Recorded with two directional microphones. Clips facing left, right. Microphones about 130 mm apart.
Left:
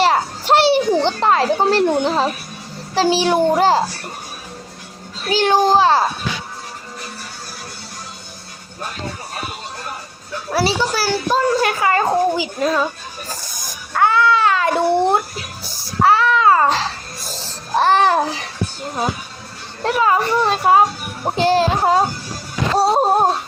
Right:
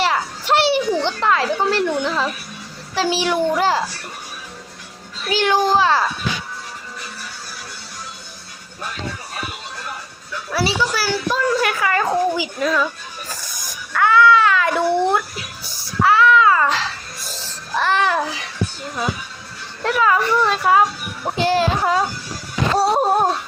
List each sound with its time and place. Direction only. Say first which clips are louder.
0.0 s a sound: left 4 dB; 35° left (ahead or behind)
2.9 s speech: left 4 dB; 35° left (ahead or behind)
5.2 s speech: left 3 dB; 35° left (ahead or behind)
10.3 s speech: left 2 dB; 35° left (ahead or behind)
13.9 s music: right 1 dB; 30° left (ahead or behind)
19.8 s speech: left 1 dB; 30° left (ahead or behind)
22.8 s a sound: left 3 dB; 30° left (ahead or behind)